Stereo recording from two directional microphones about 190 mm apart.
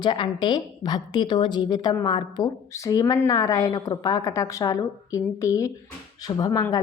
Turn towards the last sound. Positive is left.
turn(degrees=20)  # may be behind; listen again after turning